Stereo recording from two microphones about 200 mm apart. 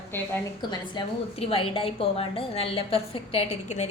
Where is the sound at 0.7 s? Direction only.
25° left (ahead or behind).